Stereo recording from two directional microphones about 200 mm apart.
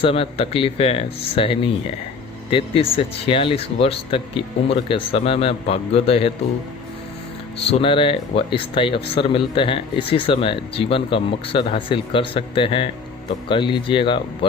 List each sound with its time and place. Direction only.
0.0 s speech: 30° left (ahead or behind)
7.7 s speech: 25° left (ahead or behind)